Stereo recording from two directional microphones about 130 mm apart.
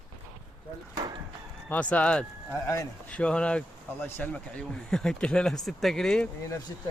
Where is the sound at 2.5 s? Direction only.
25° left (ahead or behind).